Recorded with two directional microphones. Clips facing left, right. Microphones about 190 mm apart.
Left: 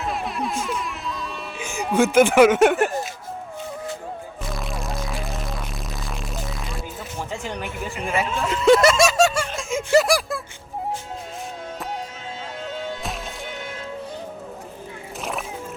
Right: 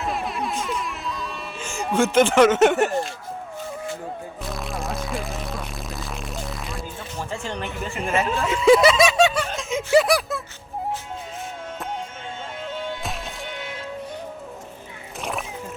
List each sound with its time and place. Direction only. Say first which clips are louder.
0.0 s music: even; centre (ahead or behind)
1.8 s speech: left 2 dB; centre (ahead or behind)
4.4 s music: right 1 dB; centre (ahead or behind)
7.3 s speech: right 2 dB; 10° left (ahead or behind)
8.0 s a sound: right 1 dB; centre (ahead or behind)
15.2 s music: even; centre (ahead or behind)